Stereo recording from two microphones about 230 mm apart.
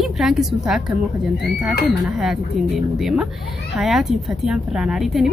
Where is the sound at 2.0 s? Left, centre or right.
Centre.